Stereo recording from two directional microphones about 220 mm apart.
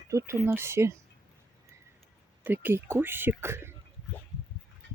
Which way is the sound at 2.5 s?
10° right (ahead or behind).